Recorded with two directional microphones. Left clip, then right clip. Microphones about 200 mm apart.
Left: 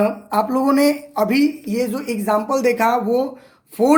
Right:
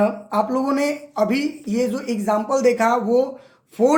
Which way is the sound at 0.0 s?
25° left (ahead or behind).